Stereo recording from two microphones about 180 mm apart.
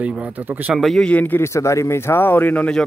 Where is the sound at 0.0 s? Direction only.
5° right (ahead or behind).